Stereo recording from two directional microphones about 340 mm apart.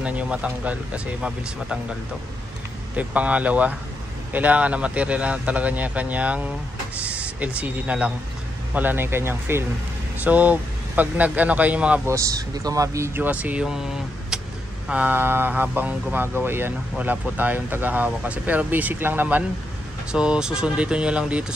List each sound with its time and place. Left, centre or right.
0.0 s speech: centre
3.0 s speech: centre
14.9 s speech: centre